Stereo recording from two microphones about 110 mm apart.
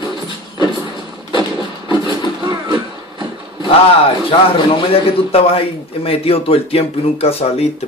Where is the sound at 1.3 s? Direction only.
45° right (ahead or behind).